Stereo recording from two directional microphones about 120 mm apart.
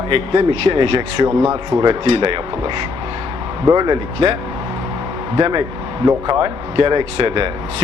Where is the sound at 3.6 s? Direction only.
35° right (ahead or behind).